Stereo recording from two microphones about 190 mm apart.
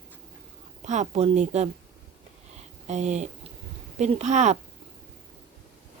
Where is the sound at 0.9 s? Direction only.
40° right (ahead or behind).